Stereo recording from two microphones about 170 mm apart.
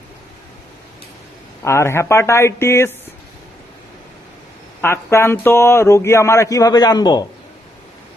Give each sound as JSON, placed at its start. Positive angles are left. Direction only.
{"t": 1.6, "sound": "speech", "side_deg": 15}
{"t": 4.8, "sound": "speech", "side_deg": 15}